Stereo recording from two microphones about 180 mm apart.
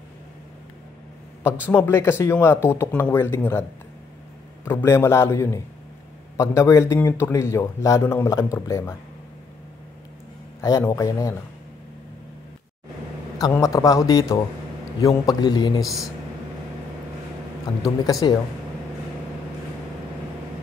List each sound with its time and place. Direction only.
1.4 s a man's voice: 10° left (ahead or behind)
4.6 s a man's voice: 15° left (ahead or behind)
10.6 s a man's voice: 20° left (ahead or behind)
13.4 s a man's voice: 20° left (ahead or behind)
15.8 s speech: centre (ahead or behind)
18.2 s a man's voice: 25° left (ahead or behind)